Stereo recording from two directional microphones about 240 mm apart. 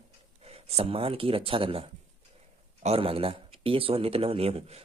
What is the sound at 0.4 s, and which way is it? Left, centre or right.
Speech, right.